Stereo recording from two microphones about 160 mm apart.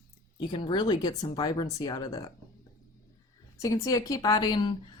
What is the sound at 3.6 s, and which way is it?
Speech, 20° left (ahead or behind).